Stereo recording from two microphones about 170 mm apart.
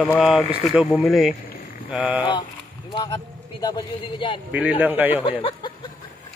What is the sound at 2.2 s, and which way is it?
A man's voice, 25° left (ahead or behind).